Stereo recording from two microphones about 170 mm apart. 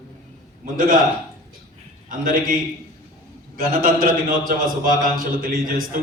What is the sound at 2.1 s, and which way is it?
A man's voice, 55° right (ahead or behind).